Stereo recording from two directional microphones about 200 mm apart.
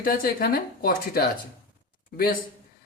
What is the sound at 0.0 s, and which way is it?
Speech, 45° left (ahead or behind).